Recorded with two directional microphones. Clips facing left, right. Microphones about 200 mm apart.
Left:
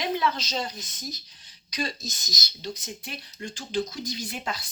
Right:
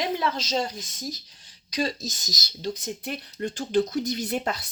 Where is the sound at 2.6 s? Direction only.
55° right (ahead or behind).